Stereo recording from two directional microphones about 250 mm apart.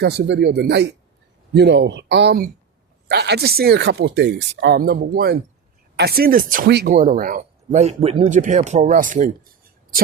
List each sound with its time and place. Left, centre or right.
0.0 s speech: right